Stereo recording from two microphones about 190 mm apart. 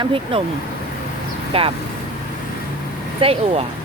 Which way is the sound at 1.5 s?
30° right (ahead or behind).